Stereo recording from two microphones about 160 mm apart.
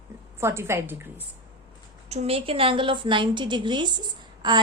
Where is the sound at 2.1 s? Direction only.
40° right (ahead or behind).